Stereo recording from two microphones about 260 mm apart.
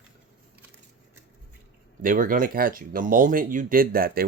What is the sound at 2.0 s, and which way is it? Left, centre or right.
Speech, right.